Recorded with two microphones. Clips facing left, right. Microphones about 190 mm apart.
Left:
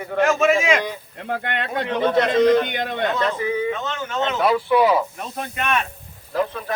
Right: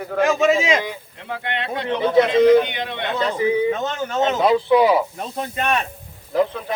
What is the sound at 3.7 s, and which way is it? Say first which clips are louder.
Speech: right 3 dB; 40° right (ahead or behind).